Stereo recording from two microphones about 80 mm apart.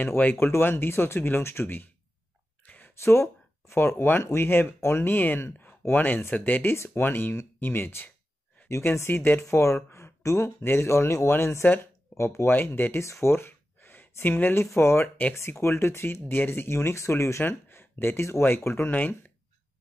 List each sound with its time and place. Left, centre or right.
0.0 s speech: left
2.6 s a sound: centre
3.0 s speech: left
8.6 s speech: left
12.5 s speech: left
13.1 s a sound: left
14.8 s speech: left